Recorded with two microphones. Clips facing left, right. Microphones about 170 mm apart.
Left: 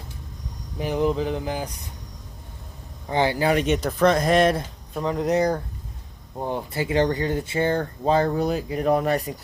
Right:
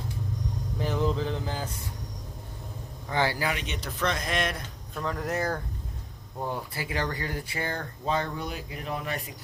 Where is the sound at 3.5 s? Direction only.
45° left (ahead or behind).